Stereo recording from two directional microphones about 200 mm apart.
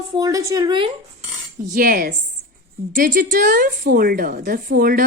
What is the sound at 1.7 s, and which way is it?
A woman's voice, 45° right (ahead or behind).